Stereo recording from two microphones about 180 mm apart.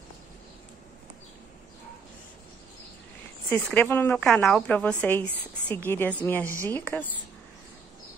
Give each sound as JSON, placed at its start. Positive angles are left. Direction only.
{"t": 3.4, "sound": "a woman's voice", "side_deg": 10}
{"t": 6.4, "sound": "a woman's voice", "side_deg": -15}
{"t": 6.7, "sound": "a woman's voice", "side_deg": 10}